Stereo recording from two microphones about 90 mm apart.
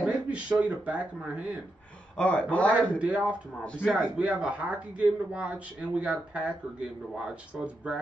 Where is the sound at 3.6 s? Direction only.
10° left (ahead or behind).